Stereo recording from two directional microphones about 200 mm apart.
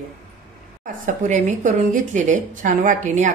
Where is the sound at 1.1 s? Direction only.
35° right (ahead or behind).